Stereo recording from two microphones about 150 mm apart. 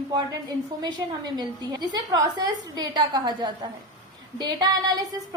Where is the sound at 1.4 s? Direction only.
30° right (ahead or behind).